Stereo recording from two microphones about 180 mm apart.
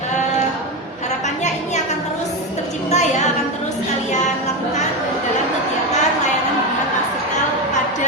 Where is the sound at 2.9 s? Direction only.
40° left (ahead or behind).